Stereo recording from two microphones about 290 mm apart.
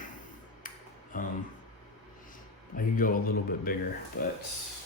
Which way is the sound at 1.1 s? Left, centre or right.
Left.